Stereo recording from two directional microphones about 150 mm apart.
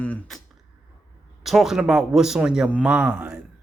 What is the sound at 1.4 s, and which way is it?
Speech, centre (ahead or behind).